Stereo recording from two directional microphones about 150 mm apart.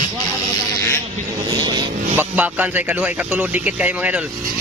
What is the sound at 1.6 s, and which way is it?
Speech, 30° right (ahead or behind).